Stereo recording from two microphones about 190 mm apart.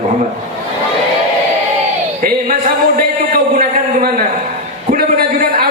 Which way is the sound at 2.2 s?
50° right (ahead or behind).